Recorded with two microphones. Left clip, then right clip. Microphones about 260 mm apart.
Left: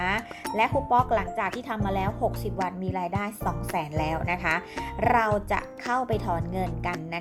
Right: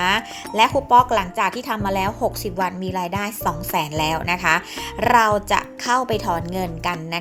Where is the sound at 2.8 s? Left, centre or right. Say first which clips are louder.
Right 5 dB; right.